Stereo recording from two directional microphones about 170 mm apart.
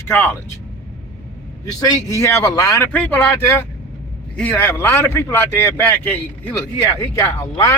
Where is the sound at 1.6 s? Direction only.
20° left (ahead or behind).